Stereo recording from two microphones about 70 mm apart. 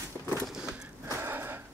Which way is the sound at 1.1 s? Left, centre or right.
Right.